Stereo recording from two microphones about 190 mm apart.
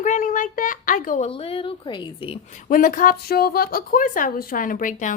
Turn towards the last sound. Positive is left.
turn(degrees=45)  # may be behind; listen again after turning